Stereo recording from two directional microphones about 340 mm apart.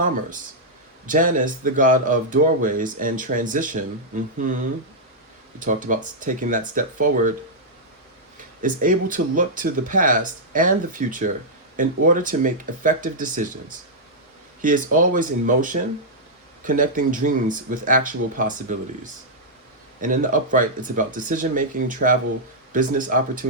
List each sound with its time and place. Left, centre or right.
1.0 s speech: right
5.5 s speech: right
8.6 s speech: right
14.6 s speech: right
20.0 s speech: right